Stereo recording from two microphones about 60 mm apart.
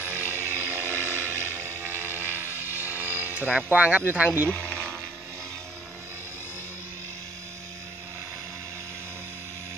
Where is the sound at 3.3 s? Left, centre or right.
Right.